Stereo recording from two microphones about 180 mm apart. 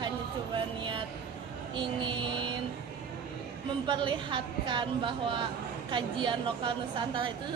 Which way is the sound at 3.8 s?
25° right (ahead or behind).